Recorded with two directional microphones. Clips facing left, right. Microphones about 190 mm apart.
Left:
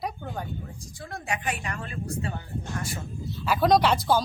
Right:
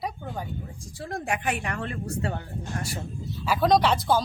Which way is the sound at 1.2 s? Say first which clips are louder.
Right 2 dB; 55° right (ahead or behind).